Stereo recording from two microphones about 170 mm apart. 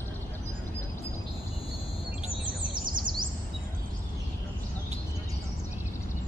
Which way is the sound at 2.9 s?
25° right (ahead or behind).